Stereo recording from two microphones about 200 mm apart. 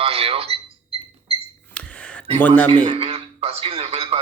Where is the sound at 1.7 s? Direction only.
5° left (ahead or behind).